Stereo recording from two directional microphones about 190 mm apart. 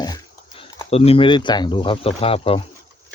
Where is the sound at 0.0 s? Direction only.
20° left (ahead or behind).